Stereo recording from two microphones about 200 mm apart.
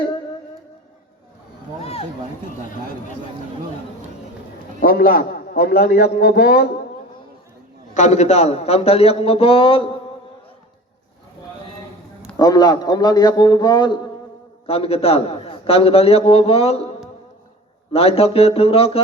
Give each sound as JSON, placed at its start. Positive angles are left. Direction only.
{"t": 1.8, "sound": "a sound", "side_deg": 30}
{"t": 4.8, "sound": "a man's voice", "side_deg": 45}
{"t": 7.9, "sound": "a man's voice", "side_deg": 35}
{"t": 12.4, "sound": "a man's voice", "side_deg": 20}
{"t": 17.9, "sound": "a man's voice", "side_deg": 30}